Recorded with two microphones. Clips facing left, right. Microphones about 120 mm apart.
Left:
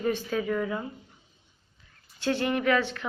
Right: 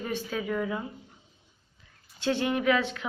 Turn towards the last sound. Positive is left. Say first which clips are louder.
# even
turn(degrees=-15)  # may be behind; listen again after turning